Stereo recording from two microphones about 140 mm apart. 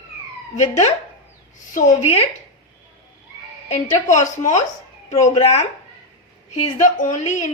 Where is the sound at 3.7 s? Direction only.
60° left (ahead or behind).